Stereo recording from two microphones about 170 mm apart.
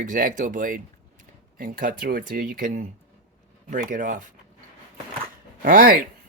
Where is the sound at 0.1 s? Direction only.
50° right (ahead or behind).